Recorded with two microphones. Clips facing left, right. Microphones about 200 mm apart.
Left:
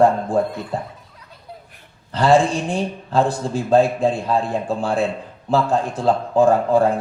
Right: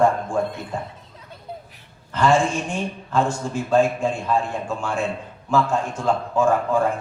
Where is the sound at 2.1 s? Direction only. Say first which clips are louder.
Left 3 dB; 35° left (ahead or behind).